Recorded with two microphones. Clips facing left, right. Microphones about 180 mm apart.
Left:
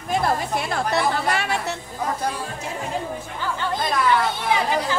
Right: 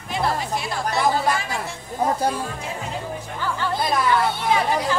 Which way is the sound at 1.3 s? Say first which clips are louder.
Left 3 dB; 70° left (ahead or behind).